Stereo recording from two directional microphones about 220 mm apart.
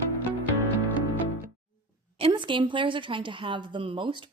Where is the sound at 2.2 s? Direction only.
25° right (ahead or behind).